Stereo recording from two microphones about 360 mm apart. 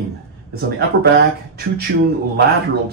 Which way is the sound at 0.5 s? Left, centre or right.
Right.